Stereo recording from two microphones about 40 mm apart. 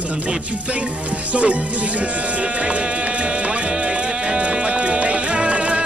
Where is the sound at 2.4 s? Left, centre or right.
Right.